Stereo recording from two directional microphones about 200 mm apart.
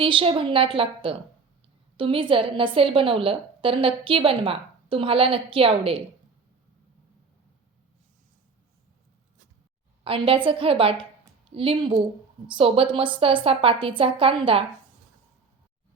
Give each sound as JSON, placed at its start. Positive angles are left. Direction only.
{"t": 0.0, "sound": "a woman's voice", "side_deg": -25}
{"t": 10.0, "sound": "a woman's voice", "side_deg": -25}